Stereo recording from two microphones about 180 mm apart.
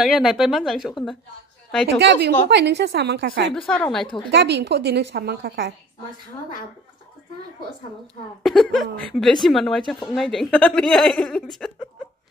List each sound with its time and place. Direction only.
0.0 s a woman's voice: 5° right (ahead or behind)
2.0 s a woman's voice: 65° right (ahead or behind)
3.5 s a woman's voice: 5° left (ahead or behind)
4.3 s a woman's voice: 70° right (ahead or behind)
8.4 s a woman's voice: centre (ahead or behind)